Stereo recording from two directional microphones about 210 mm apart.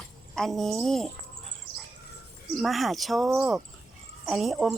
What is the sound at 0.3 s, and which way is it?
Speech, centre (ahead or behind).